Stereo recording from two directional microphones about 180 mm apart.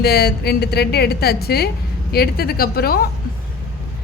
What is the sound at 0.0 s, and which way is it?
A woman's voice, 60° left (ahead or behind).